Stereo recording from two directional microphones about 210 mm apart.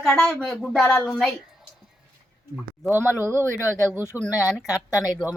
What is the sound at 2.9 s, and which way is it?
Speech, 10° right (ahead or behind).